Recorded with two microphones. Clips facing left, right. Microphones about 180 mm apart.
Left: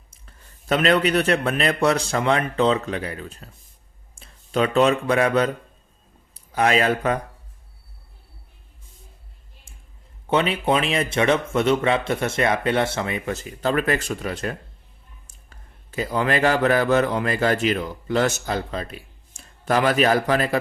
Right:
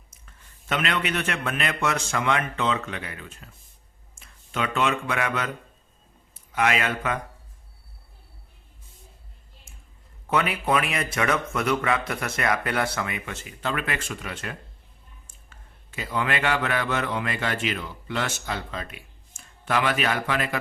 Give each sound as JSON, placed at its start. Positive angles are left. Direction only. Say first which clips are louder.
{"t": 0.1, "sound": "a man's voice", "louder": "left 5 dB", "side_deg": 35}
{"t": 10.2, "sound": "a man's voice", "louder": "left 4 dB", "side_deg": 25}